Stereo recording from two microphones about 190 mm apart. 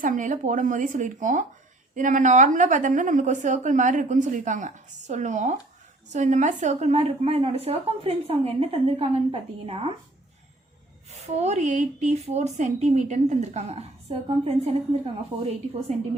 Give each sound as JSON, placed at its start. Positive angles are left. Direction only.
{"t": 0.0, "sound": "speech", "side_deg": -45}
{"t": 11.3, "sound": "speech", "side_deg": -35}